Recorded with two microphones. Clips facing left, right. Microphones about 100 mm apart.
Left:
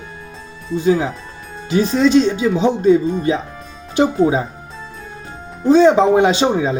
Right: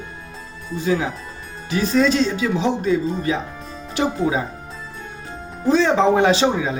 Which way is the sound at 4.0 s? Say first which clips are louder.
Left 6 dB; 25° left (ahead or behind).